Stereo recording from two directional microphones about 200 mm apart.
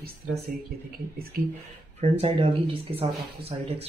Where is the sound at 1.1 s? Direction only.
50° right (ahead or behind).